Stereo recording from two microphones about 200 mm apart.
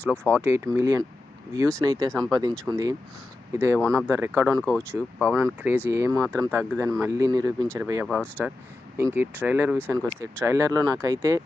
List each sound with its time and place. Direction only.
0.0 s speech: 10° left (ahead or behind)
0.4 s speech: 15° right (ahead or behind)
3.8 s speech: 5° left (ahead or behind)
4.1 s speech: 15° right (ahead or behind)
4.4 s speech: 5° left (ahead or behind)
5.6 s speech: 10° right (ahead or behind)
6.1 s speech: centre (ahead or behind)
6.4 s speech: 10° right (ahead or behind)
8.0 s speech: 5° left (ahead or behind)
9.0 s speech: 10° right (ahead or behind)